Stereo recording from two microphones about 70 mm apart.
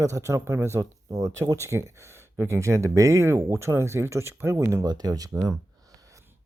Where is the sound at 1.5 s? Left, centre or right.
Right.